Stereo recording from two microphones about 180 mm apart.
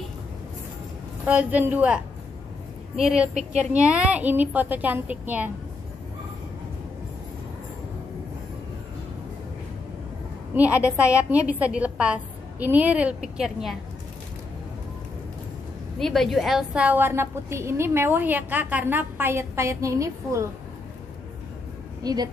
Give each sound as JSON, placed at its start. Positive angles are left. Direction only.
{"t": 1.2, "sound": "a woman's voice", "side_deg": -10}
{"t": 3.0, "sound": "a woman's voice", "side_deg": -5}
{"t": 10.5, "sound": "a woman's voice", "side_deg": -10}
{"t": 16.0, "sound": "a woman's voice", "side_deg": 0}
{"t": 22.0, "sound": "a woman's voice", "side_deg": -20}